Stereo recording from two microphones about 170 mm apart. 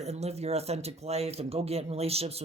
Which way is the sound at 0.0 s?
40° right (ahead or behind).